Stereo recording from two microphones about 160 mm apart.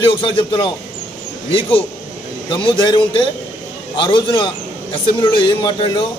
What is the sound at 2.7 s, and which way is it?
Speech, 30° left (ahead or behind).